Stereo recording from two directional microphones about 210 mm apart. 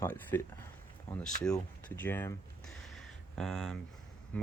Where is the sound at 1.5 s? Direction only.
10° left (ahead or behind).